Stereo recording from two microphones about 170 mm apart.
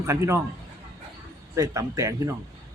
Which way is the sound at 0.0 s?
15° right (ahead or behind).